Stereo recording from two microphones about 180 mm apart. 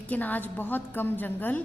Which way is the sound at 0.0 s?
10° left (ahead or behind).